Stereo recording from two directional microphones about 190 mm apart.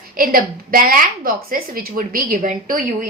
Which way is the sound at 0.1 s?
50° right (ahead or behind).